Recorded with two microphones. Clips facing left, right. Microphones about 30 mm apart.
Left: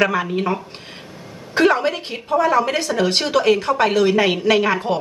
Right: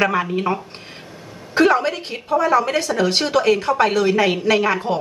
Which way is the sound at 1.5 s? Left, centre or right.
Centre.